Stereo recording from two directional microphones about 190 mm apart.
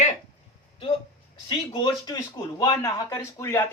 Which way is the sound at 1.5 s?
25° left (ahead or behind).